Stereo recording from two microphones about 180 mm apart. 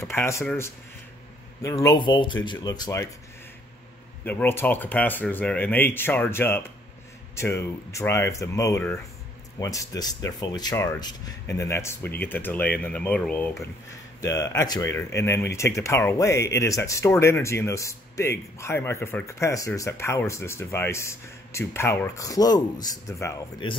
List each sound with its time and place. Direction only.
0.1 s speech: 15° left (ahead or behind)
4.2 s speech: 10° left (ahead or behind)
14.2 s speech: 20° left (ahead or behind)